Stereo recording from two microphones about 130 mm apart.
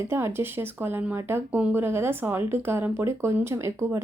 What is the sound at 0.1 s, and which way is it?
Speech, 20° right (ahead or behind).